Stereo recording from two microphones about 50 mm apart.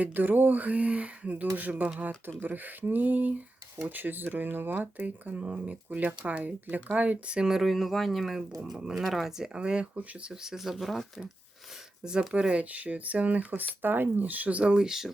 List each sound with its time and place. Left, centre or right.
0.0 s speech: right
7.3 s speech: centre
9.6 s speech: right
9.9 s speech: right
10.4 s speech: centre
12.0 s speech: centre
13.5 s speech: right; by 15.1 s centre